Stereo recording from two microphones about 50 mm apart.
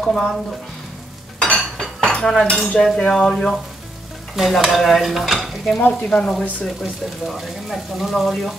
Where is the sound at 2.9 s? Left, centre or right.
Centre.